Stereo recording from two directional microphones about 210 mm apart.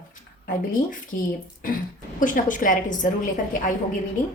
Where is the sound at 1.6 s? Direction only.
40° left (ahead or behind).